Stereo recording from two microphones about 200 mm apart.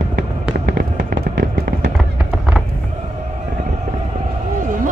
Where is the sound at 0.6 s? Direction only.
45° right (ahead or behind).